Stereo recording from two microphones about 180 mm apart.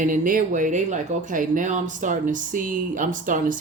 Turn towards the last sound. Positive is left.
turn(degrees=-45)  # may be behind; listen again after turning